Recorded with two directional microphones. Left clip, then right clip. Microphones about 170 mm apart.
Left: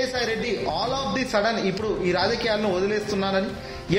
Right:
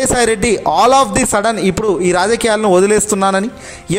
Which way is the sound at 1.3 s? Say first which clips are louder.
Right 9 dB; 40° right (ahead or behind).